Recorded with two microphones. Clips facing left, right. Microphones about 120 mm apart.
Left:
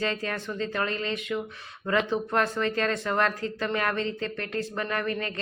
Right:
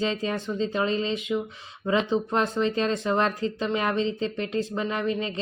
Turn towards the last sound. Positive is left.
turn(degrees=-20)  # may be behind; listen again after turning